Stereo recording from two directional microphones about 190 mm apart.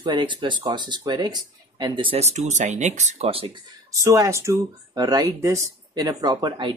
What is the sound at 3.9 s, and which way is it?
Speech, 15° right (ahead or behind).